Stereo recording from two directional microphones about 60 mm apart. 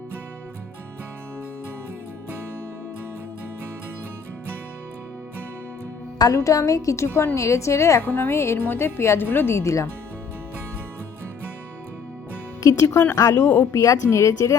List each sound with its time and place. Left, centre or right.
6.1 s a woman's voice: left
8.0 s a woman's voice: left
8.3 s music: left
8.5 s a woman's voice: left
9.6 s a woman's voice: left
12.6 s a woman's voice: left
13.3 s a woman's voice: left
13.7 s a woman's voice: left